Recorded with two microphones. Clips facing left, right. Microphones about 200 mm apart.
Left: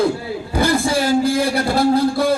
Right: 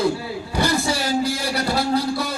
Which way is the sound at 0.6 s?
55° left (ahead or behind).